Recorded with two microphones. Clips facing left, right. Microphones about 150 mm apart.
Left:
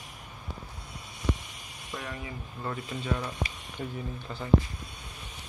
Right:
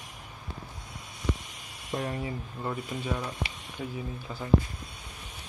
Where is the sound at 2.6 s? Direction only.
10° right (ahead or behind).